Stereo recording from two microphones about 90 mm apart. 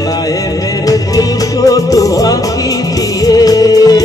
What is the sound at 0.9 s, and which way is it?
Music, 40° left (ahead or behind).